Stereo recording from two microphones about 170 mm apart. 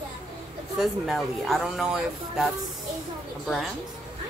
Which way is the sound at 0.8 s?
Centre (ahead or behind).